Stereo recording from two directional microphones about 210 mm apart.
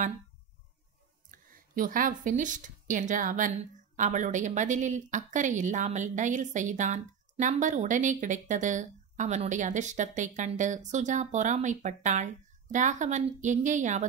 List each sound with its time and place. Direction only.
1.3 s speech: 40° right (ahead or behind)